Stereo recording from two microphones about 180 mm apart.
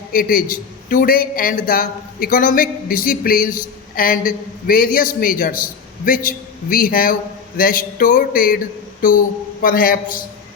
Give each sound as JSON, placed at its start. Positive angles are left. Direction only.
{"t": 0.1, "sound": "a man's voice", "side_deg": 55}
{"t": 9.6, "sound": "a man's voice", "side_deg": 50}